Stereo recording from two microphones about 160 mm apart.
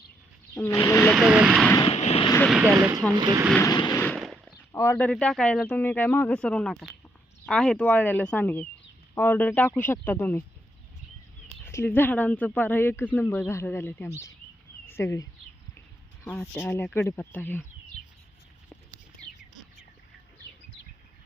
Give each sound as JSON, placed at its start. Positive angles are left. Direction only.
{"t": 0.5, "sound": "speech", "side_deg": 15}
{"t": 1.1, "sound": "speech", "side_deg": -5}
{"t": 1.8, "sound": "vehicle", "side_deg": 40}
{"t": 2.5, "sound": "speech", "side_deg": -5}
{"t": 2.7, "sound": "speech", "side_deg": -20}
{"t": 3.6, "sound": "vehicle", "side_deg": 25}
{"t": 4.0, "sound": "firecracker", "side_deg": 0}
{"t": 4.7, "sound": "speech", "side_deg": 20}
{"t": 4.9, "sound": "speech", "side_deg": 5}
{"t": 11.6, "sound": "speech", "side_deg": 15}
{"t": 16.2, "sound": "speech", "side_deg": 5}